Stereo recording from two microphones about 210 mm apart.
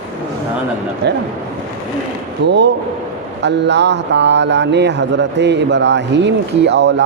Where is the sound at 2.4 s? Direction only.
55° right (ahead or behind).